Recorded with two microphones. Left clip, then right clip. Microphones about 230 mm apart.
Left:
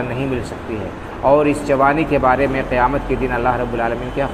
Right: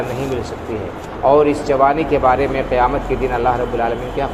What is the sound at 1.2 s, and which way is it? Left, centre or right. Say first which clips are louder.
Speech: right 1 dB; left.